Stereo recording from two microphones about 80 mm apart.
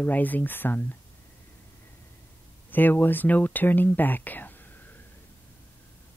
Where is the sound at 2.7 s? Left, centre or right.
Left.